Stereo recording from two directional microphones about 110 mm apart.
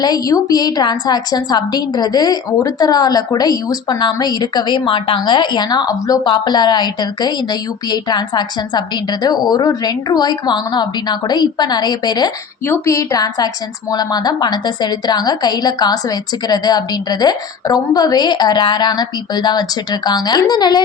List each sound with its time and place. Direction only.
0.0 s a woman's voice: 35° left (ahead or behind)
12.6 s a woman's voice: 25° left (ahead or behind); by 20.8 s 40° left (ahead or behind)